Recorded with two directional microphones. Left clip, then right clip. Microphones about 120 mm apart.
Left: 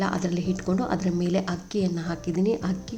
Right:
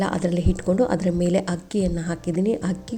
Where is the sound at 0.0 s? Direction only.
35° right (ahead or behind).